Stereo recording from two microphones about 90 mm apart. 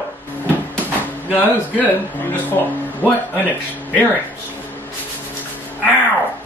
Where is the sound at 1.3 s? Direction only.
20° left (ahead or behind).